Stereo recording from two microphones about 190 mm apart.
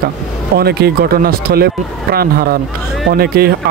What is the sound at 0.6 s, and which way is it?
Speech, 55° right (ahead or behind).